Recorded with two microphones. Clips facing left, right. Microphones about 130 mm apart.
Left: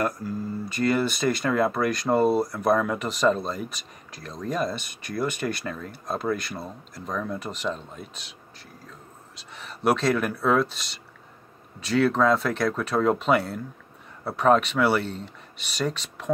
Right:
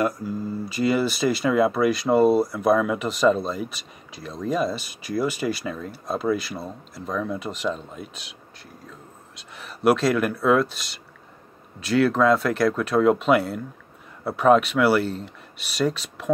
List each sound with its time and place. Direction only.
0.0 s speech: centre (ahead or behind)
9.4 s speech: centre (ahead or behind)